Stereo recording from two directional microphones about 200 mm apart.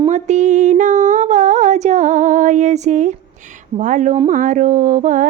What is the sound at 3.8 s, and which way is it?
Speech, 40° right (ahead or behind).